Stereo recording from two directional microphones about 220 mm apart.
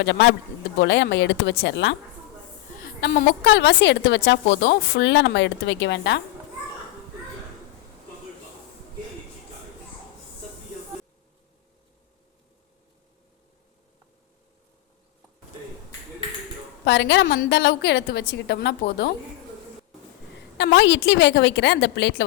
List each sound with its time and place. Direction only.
0.0 s speech: 55° left (ahead or behind)
2.8 s a sound: 40° left (ahead or behind)
3.4 s a woman's voice: 55° left (ahead or behind)
16.8 s a woman's voice: 50° left (ahead or behind)
20.6 s a woman's voice: 55° left (ahead or behind)